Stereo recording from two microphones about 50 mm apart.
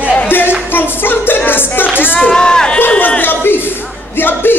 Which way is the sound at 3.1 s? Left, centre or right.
Left.